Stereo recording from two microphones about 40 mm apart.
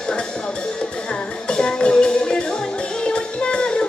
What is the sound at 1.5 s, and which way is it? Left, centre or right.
Music, centre.